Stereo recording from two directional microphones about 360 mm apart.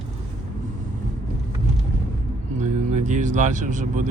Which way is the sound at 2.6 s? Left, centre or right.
Centre.